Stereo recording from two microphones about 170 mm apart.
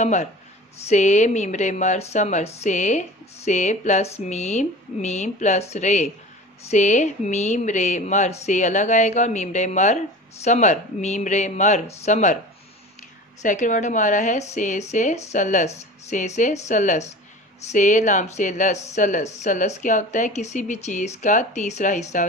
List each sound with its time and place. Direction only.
0.0 s speech: 40° left (ahead or behind)
13.4 s speech: 45° left (ahead or behind)